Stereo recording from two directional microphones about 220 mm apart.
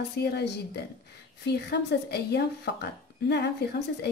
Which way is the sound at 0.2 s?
50° left (ahead or behind).